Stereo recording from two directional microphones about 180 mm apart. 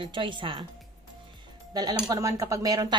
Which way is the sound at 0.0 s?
25° right (ahead or behind).